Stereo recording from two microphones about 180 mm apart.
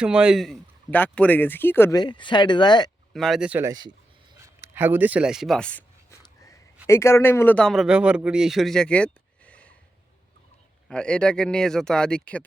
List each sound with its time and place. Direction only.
0.0 s speech: 5° right (ahead or behind); by 2.9 s 25° left (ahead or behind)
3.1 s a man's voice: centre (ahead or behind)
3.7 s speech: 25° right (ahead or behind)
4.4 s a man's voice: 15° right (ahead or behind); by 9.0 s 5° left (ahead or behind)
9.5 s a sound: 5° left (ahead or behind)
10.8 s a man's voice: 5° left (ahead or behind)